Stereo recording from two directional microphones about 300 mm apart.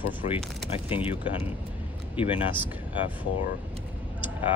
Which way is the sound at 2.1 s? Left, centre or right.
Centre.